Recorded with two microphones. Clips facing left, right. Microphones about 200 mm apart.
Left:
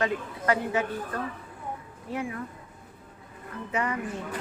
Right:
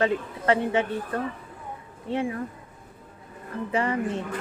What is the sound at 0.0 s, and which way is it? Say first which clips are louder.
Speech: right 4 dB; 25° right (ahead or behind).